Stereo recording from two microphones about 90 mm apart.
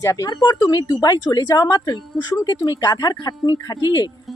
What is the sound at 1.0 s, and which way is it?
Speech, 45° left (ahead or behind).